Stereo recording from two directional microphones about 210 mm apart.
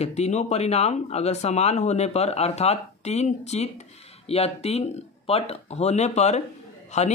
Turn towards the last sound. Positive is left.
turn(degrees=35)  # may be behind; listen again after turning